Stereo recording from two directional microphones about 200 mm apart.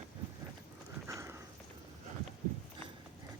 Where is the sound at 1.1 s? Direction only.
15° right (ahead or behind).